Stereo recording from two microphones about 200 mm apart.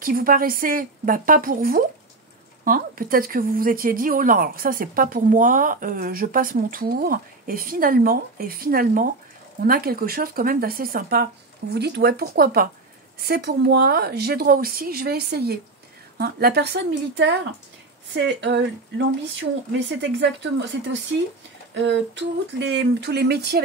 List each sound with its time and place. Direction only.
0.0 s speech: 45° right (ahead or behind)